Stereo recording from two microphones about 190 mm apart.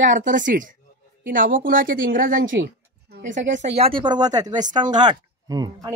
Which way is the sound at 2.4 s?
80° right.